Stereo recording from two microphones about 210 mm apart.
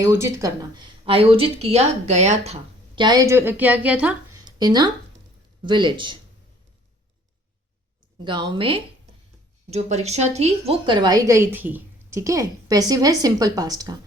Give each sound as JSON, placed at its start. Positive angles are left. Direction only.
{"t": 0.0, "sound": "speech", "side_deg": -15}
{"t": 8.2, "sound": "a woman's voice", "side_deg": -20}